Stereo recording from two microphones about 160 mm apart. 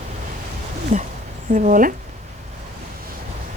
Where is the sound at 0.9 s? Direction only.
60° right (ahead or behind).